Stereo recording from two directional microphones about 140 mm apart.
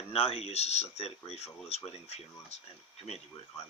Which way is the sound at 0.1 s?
45° left (ahead or behind).